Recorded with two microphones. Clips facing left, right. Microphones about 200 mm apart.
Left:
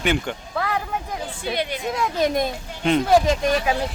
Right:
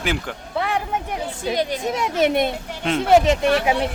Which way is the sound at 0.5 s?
25° right (ahead or behind).